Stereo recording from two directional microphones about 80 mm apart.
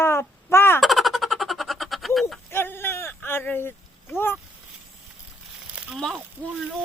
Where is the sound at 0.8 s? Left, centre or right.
Centre.